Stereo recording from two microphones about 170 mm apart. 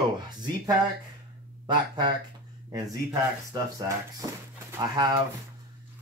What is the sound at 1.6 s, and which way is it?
Speech, 25° right (ahead or behind).